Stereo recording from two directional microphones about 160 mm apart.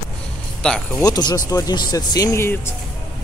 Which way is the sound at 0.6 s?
5° left (ahead or behind).